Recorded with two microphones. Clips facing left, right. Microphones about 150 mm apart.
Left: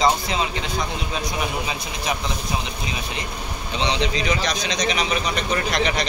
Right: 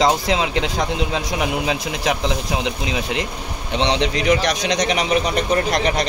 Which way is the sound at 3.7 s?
75° right (ahead or behind).